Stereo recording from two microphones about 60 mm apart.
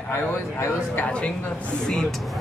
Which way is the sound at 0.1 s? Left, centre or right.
Left.